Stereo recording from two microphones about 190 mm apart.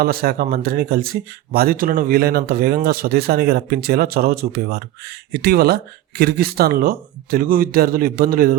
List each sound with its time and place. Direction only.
0.0 s speech: 55° right (ahead or behind)